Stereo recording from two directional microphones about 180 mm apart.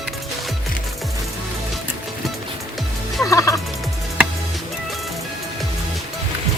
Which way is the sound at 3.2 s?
15° left (ahead or behind).